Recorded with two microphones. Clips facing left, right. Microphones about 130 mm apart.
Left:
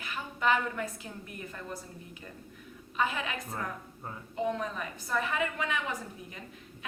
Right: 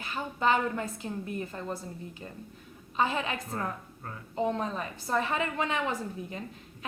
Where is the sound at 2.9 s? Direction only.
30° right (ahead or behind).